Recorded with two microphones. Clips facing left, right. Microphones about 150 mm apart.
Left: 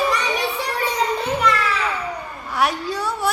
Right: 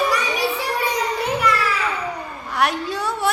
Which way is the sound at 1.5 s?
10° right (ahead or behind).